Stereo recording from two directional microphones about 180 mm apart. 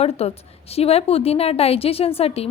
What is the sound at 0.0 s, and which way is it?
A woman's voice, 35° left (ahead or behind).